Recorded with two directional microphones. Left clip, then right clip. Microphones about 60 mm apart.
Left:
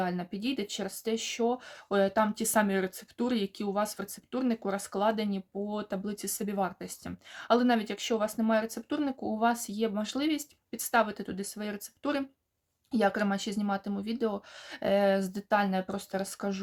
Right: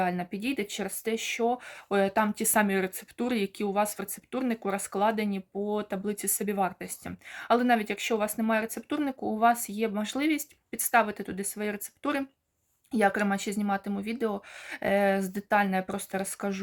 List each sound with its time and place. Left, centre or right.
0.0 s speech: left
2.8 s speech: left
3.3 s speech: left
4.6 s speech: left
4.9 s speech: left
16.2 s speech: left